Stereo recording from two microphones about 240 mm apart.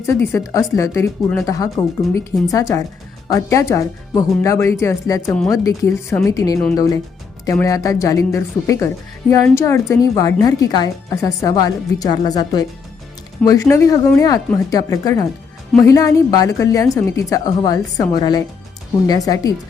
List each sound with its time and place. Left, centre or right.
0.0 s a woman's voice: centre